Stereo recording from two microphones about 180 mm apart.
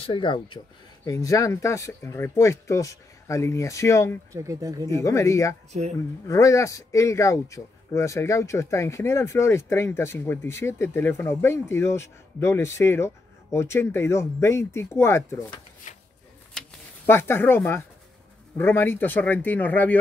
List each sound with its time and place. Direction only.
0.0 s speech: 25° left (ahead or behind)
4.3 s speech: 15° right (ahead or behind)
4.9 s speech: 15° left (ahead or behind)
15.9 s a sound: 40° left (ahead or behind)
16.5 s a sound: 10° left (ahead or behind)
18.6 s speech: 10° left (ahead or behind)